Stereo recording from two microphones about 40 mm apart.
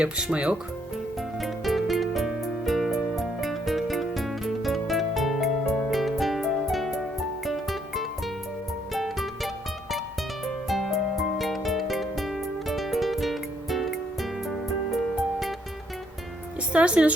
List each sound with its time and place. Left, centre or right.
0.0 s speech: right
1.4 s music: centre
16.7 s music: right